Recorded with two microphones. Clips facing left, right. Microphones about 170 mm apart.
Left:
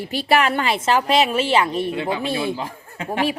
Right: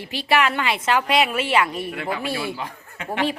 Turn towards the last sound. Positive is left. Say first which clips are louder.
# left 3 dB
turn(degrees=30)  # may be behind; listen again after turning